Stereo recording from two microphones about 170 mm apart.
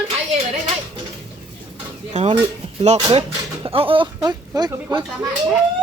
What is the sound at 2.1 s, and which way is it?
Speech, 40° right (ahead or behind).